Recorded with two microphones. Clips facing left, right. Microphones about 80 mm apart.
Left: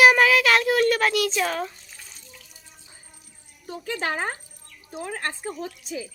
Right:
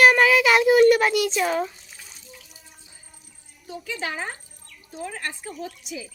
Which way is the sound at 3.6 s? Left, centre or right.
Left.